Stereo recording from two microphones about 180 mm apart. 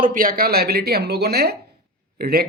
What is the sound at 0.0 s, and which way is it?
Speech, 50° right (ahead or behind).